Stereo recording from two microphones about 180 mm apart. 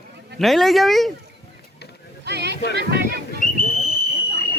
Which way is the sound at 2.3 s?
70° right (ahead or behind).